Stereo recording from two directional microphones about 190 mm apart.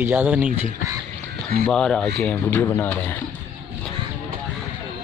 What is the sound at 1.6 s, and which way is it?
Speech, 5° left (ahead or behind).